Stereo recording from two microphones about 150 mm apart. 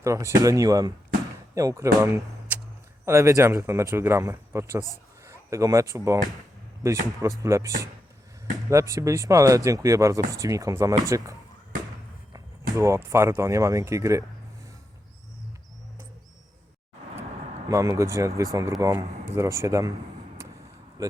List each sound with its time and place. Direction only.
0.0 s speech: 20° right (ahead or behind)
17.7 s speech: 20° right (ahead or behind)
20.4 s vehicle: 20° right (ahead or behind)
21.0 s speech: 25° right (ahead or behind)